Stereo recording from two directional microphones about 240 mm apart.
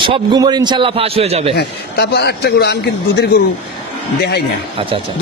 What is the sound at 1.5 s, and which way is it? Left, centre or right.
A man's voice, left.